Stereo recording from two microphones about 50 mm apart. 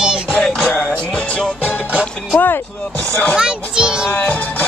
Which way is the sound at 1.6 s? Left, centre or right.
Left.